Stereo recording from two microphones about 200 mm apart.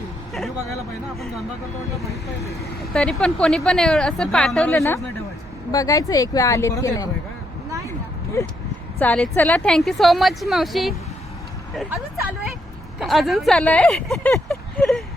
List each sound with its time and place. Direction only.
0.3 s a sound: centre (ahead or behind)
2.9 s a woman's voice: 5° left (ahead or behind)
9.0 s a woman's voice: 5° left (ahead or behind)
13.0 s a woman's voice: centre (ahead or behind)